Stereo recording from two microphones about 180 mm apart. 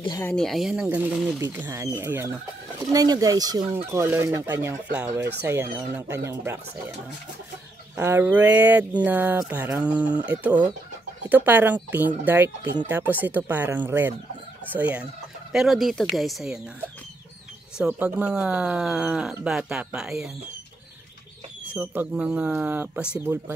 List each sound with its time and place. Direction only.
0.0 s speech: 20° left (ahead or behind)
0.3 s speech: centre (ahead or behind)
1.4 s speech: 10° right (ahead or behind)
7.9 s speech: 10° right (ahead or behind)
17.7 s speech: 10° right (ahead or behind)
21.7 s speech: 5° right (ahead or behind)